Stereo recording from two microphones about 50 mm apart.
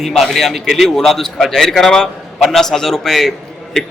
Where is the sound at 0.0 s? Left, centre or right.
Centre.